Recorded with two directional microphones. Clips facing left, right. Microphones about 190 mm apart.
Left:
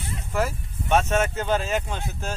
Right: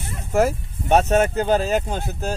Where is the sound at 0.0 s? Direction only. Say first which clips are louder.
Right 7 dB; 45° right (ahead or behind).